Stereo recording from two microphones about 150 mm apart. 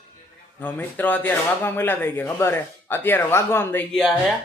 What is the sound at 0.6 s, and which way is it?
Speech, 10° left (ahead or behind).